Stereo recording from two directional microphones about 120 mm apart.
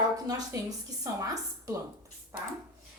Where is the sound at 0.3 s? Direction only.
30° right (ahead or behind).